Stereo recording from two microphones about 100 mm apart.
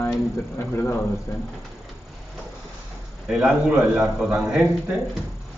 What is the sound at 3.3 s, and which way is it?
Speech, 5° right (ahead or behind).